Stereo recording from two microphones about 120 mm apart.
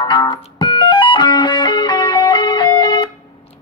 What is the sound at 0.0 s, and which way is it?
Music, 40° left (ahead or behind).